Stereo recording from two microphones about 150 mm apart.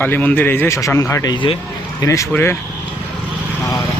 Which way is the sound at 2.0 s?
15° left (ahead or behind).